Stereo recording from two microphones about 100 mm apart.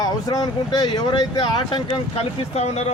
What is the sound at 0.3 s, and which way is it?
Speech, 40° left (ahead or behind).